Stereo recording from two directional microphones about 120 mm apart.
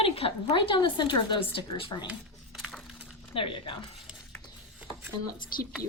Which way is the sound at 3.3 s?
45° left (ahead or behind).